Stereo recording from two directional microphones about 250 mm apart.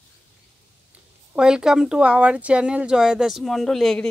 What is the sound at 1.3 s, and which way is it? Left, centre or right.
Speech, centre.